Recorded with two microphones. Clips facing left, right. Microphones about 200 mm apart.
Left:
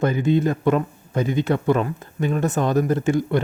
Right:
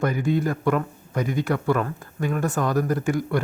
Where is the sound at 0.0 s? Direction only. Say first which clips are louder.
Left 4 dB; 25° left (ahead or behind).